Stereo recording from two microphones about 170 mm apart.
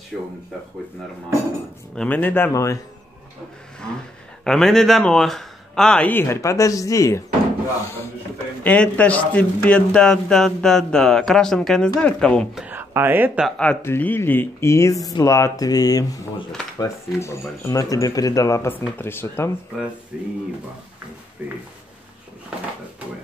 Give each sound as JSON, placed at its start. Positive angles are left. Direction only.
{"t": 2.0, "sound": "speech", "side_deg": 10}
{"t": 4.5, "sound": "speech", "side_deg": 5}
{"t": 8.6, "sound": "speech", "side_deg": 10}
{"t": 12.6, "sound": "speech", "side_deg": -10}
{"t": 13.6, "sound": "speech", "side_deg": 10}
{"t": 21.4, "sound": "speech", "side_deg": -10}